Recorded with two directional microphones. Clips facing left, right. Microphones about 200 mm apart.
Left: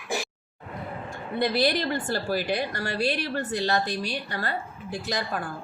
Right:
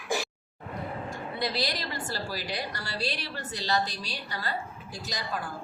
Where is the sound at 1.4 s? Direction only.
55° left (ahead or behind).